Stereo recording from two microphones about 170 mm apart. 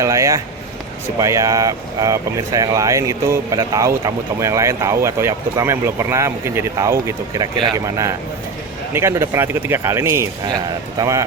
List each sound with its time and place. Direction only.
0.0 s speech: 15° right (ahead or behind)